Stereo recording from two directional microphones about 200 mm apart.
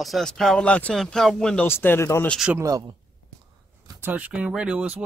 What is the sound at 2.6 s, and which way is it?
Speech, 15° right (ahead or behind).